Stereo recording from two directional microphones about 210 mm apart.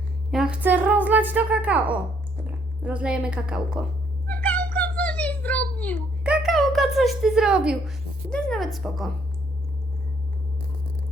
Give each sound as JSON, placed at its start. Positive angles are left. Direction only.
{"t": 0.3, "sound": "speech", "side_deg": -5}
{"t": 4.3, "sound": "cat", "side_deg": 10}
{"t": 6.2, "sound": "speech", "side_deg": -5}